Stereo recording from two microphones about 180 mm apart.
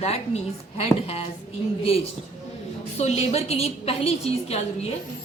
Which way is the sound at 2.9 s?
35° left (ahead or behind).